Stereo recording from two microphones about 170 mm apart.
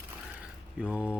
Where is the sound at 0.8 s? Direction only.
5° right (ahead or behind).